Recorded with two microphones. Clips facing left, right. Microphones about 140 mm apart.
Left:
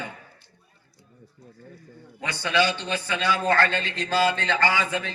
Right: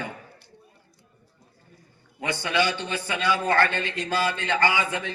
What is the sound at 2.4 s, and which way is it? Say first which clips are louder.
A man's voice: left 2 dB; 15° right (ahead or behind).